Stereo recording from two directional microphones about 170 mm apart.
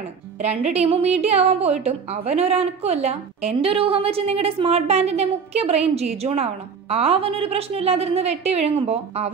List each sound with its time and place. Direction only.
0.4 s a woman's voice: 40° right (ahead or behind)